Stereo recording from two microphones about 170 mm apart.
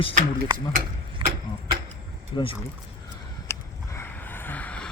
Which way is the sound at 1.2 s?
30° right (ahead or behind).